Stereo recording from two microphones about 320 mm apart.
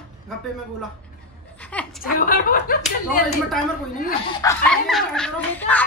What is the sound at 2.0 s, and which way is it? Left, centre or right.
Speech, left.